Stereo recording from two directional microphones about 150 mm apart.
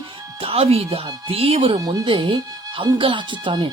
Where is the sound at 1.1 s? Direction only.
35° right (ahead or behind).